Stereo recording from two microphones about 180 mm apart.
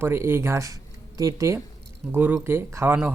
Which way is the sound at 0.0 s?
15° right (ahead or behind).